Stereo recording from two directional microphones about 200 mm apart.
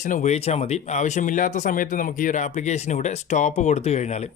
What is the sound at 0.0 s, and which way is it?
Speech, 40° left (ahead or behind).